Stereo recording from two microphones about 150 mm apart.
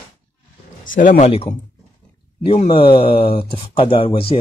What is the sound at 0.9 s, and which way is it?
Speech, 55° left (ahead or behind).